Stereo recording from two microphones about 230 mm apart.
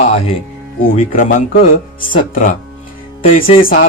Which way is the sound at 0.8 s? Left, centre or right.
Left.